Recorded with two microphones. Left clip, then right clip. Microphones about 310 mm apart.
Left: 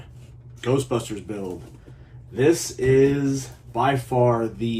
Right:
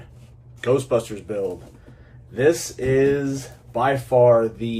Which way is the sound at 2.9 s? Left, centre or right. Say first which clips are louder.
Right 1 dB; centre.